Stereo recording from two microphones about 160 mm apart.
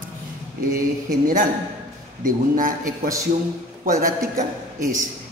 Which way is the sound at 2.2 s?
60° right (ahead or behind).